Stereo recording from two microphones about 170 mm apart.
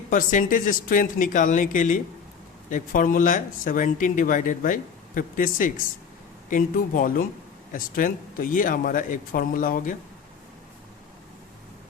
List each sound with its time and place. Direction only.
0.1 s speech: 50° left (ahead or behind)